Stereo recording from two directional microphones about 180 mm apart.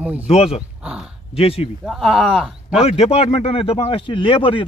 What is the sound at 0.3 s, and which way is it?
Speech, 35° left (ahead or behind).